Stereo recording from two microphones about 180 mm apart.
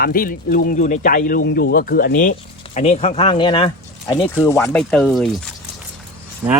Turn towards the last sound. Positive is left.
turn(degrees=-10)  # may be behind; listen again after turning